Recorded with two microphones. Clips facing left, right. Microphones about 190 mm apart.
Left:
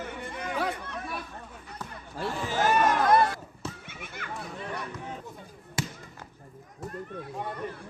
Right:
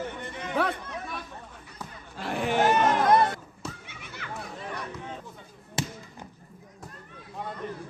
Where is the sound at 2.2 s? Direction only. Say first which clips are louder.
Right 4 dB; 65° right (ahead or behind).